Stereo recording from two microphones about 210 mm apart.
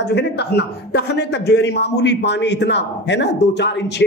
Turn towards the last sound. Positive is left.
turn(degrees=55)  # may be behind; listen again after turning